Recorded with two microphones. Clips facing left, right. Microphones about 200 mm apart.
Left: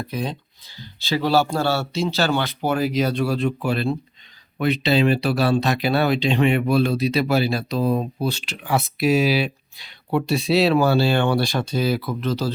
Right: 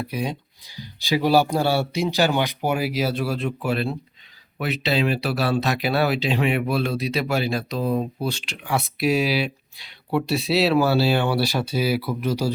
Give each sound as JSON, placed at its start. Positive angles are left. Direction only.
{"t": 0.0, "sound": "speech", "side_deg": -10}
{"t": 7.3, "sound": "speech", "side_deg": 35}
{"t": 8.7, "sound": "speech", "side_deg": 0}